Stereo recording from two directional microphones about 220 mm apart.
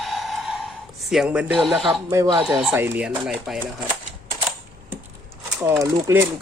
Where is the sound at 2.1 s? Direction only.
15° right (ahead or behind).